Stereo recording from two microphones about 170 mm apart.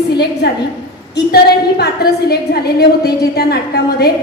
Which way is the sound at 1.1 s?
70° left (ahead or behind).